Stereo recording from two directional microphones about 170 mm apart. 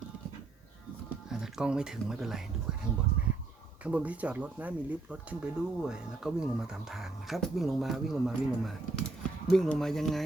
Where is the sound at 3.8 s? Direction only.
10° right (ahead or behind).